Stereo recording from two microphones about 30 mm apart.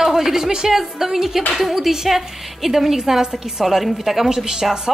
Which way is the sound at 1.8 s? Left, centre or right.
Centre.